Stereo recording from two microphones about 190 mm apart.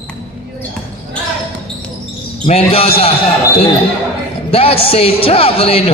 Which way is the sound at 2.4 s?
30° left (ahead or behind).